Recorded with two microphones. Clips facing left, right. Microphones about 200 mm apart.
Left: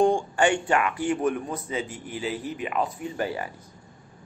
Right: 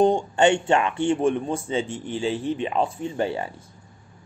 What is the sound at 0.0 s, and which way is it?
A man's voice, 25° right (ahead or behind).